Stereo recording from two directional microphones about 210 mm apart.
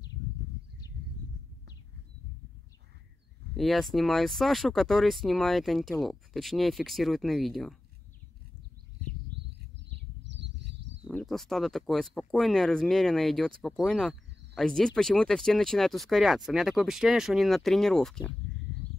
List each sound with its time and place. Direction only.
3.5 s speech: centre (ahead or behind)
10.2 s a sound: 60° right (ahead or behind)
11.1 s speech: centre (ahead or behind)